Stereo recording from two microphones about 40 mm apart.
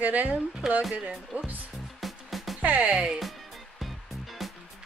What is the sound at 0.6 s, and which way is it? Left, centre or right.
Speech, centre.